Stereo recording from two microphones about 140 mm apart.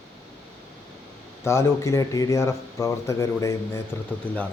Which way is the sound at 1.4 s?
20° left (ahead or behind).